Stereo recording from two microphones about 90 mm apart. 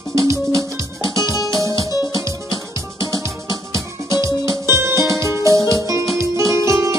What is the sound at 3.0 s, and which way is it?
Music, 35° right (ahead or behind).